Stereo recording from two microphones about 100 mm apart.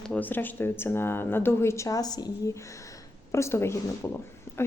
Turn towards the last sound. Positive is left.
turn(degrees=25)  # may be behind; listen again after turning